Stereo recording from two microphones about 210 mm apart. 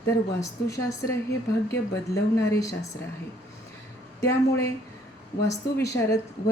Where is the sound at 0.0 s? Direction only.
15° left (ahead or behind).